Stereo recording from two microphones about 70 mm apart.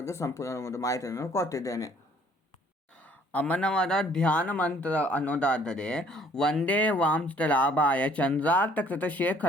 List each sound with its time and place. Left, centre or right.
0.0 s speech: left
3.0 s speech: centre
6.7 s speech: left